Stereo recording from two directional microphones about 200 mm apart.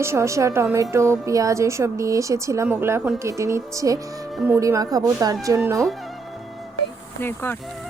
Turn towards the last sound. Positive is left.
turn(degrees=10)  # may be behind; listen again after turning